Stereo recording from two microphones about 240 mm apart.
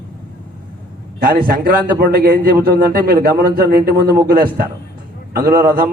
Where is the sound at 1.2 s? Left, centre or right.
Right.